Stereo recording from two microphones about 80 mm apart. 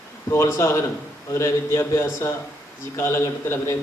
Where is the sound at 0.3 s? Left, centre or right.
Left.